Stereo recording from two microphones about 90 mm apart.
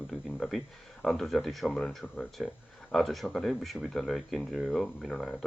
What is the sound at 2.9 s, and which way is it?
Speech, centre (ahead or behind).